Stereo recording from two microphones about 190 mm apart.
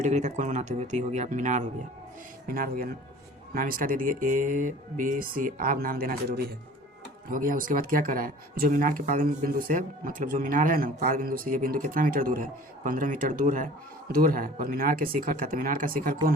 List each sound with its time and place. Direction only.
0.0 s speech: 40° right (ahead or behind); by 6.5 s 55° right (ahead or behind)
7.3 s speech: 45° right (ahead or behind)